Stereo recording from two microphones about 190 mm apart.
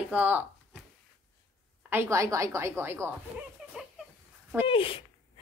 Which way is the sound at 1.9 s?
15° right (ahead or behind).